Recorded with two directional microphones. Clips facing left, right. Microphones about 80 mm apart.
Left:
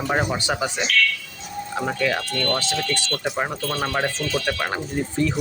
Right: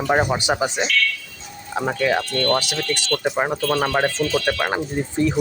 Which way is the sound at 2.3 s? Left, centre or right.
Right.